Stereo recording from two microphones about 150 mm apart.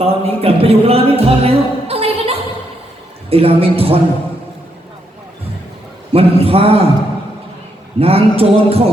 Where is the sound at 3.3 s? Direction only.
40° right (ahead or behind).